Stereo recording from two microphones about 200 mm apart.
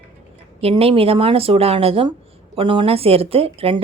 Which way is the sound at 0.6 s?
30° right (ahead or behind).